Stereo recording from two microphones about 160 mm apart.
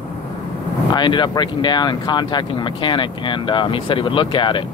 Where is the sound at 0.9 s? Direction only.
30° left (ahead or behind).